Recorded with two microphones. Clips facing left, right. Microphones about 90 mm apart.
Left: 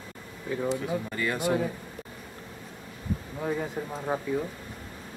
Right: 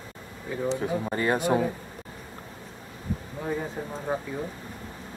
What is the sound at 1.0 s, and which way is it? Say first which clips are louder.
Speech: right 5 dB; 35° right (ahead or behind).